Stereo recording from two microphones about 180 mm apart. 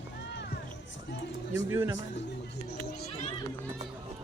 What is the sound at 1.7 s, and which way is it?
Speech, 15° right (ahead or behind).